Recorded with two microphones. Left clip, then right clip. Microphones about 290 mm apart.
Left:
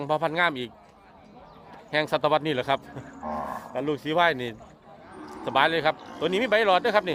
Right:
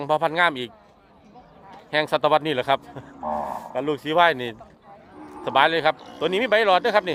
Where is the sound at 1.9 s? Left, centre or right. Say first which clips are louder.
Right 4 dB; centre.